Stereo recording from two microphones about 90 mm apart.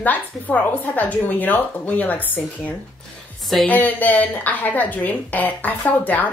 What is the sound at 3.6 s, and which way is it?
A woman's voice, 20° left (ahead or behind).